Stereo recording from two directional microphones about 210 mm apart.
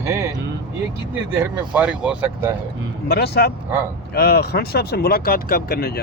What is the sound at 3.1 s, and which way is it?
Speech, 50° left (ahead or behind).